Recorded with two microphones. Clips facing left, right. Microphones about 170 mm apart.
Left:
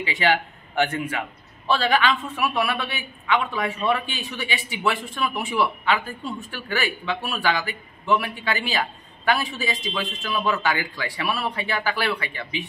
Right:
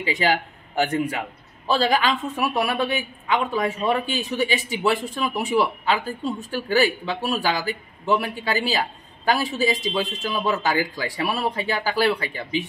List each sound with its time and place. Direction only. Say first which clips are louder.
0.0 s a man's voice: even; 40° right (ahead or behind)